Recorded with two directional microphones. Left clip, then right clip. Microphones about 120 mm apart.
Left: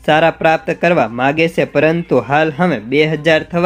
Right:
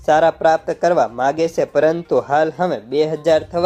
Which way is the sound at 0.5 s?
35° left (ahead or behind).